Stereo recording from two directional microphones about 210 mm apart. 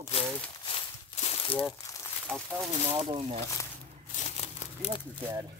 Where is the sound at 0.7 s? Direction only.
30° left (ahead or behind).